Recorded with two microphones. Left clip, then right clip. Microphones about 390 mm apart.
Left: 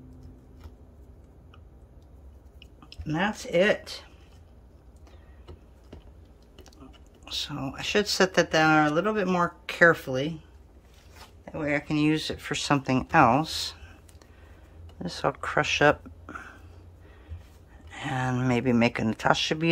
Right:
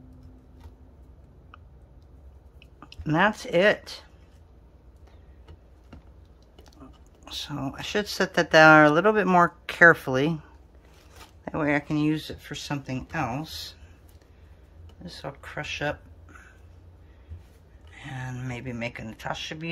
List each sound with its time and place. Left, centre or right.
2.9 s speech: centre
6.8 s whispering: centre
7.2 s speech: centre
11.4 s speech: centre
15.0 s speech: centre
17.9 s speech: centre